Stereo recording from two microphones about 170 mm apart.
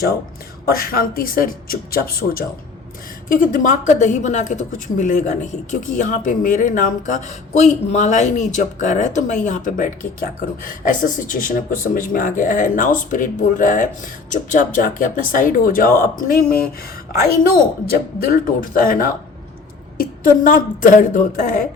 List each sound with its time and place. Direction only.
0.7 s a woman's voice: 60° left (ahead or behind)
17.8 s a woman's voice: 60° left (ahead or behind)